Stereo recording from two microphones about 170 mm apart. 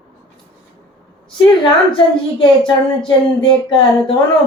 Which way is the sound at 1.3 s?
25° left (ahead or behind).